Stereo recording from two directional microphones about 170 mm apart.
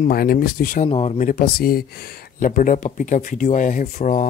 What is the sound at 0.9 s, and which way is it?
Speech, 35° left (ahead or behind).